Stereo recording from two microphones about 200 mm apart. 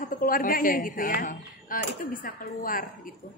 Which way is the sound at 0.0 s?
45° left (ahead or behind).